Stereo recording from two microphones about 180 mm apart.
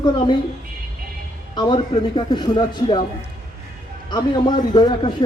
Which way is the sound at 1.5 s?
25° left (ahead or behind).